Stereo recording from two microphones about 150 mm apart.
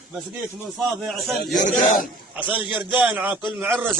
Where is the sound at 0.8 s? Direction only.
Centre (ahead or behind).